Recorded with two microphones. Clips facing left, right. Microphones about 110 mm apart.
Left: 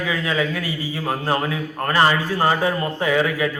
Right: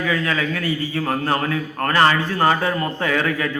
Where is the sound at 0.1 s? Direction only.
15° left (ahead or behind).